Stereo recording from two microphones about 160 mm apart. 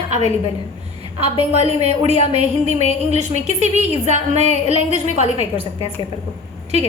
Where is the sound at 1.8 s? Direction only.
40° left (ahead or behind).